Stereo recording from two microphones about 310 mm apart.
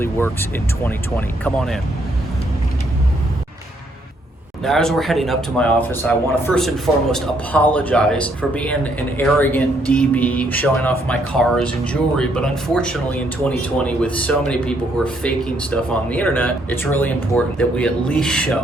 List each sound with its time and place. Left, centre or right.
0.0 s speech: centre
4.6 s speech: centre